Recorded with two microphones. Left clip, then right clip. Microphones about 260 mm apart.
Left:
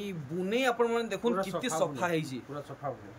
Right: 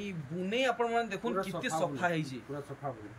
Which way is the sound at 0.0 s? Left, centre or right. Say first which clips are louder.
Left 3 dB; centre.